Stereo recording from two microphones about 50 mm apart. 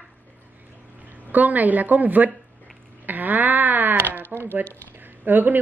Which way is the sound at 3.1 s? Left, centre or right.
Right.